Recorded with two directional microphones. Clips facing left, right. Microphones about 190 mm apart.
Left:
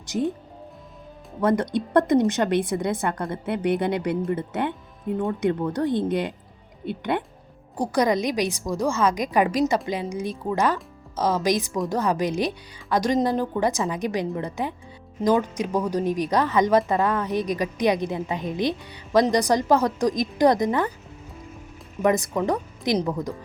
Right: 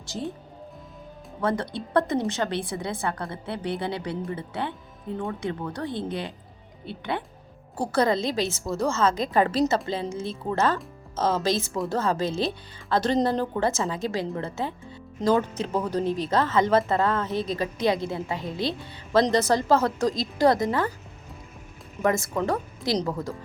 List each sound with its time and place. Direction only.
0.0 s speech: 20° left (ahead or behind)
1.4 s a woman's voice: 20° left (ahead or behind)
5.4 s a woman's voice: 20° left (ahead or behind)
7.8 s speech: 15° left (ahead or behind)
22.0 s speech: 20° left (ahead or behind)